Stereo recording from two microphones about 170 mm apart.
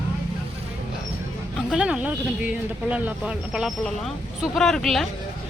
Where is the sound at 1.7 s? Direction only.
5° right (ahead or behind).